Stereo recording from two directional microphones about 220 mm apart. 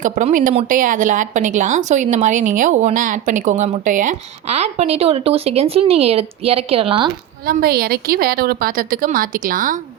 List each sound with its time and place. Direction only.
0.0 s a woman's voice: 35° right (ahead or behind)
7.4 s a woman's voice: 45° right (ahead or behind)